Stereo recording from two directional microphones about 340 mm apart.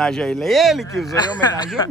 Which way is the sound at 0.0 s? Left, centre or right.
Centre.